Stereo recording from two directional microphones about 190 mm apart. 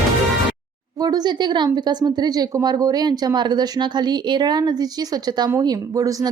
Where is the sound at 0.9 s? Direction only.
20° right (ahead or behind).